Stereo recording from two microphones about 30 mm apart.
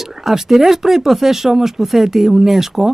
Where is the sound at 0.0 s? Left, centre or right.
Centre.